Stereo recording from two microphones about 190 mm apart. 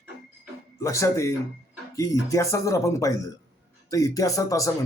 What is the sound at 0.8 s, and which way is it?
Speech, 15° left (ahead or behind).